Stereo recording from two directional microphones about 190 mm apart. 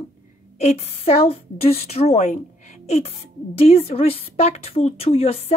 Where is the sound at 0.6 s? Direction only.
35° left (ahead or behind).